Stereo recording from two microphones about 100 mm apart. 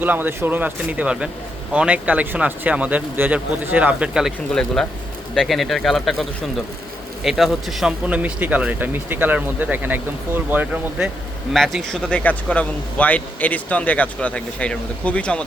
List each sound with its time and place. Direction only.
0.0 s speech: 20° right (ahead or behind)
4.5 s speech: 5° left (ahead or behind)
7.3 s speech: 5° right (ahead or behind); by 11.1 s 20° right (ahead or behind)
11.5 s a man's voice: 5° left (ahead or behind)